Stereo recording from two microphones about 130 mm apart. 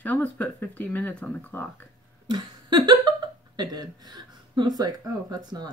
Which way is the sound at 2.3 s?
35° right (ahead or behind).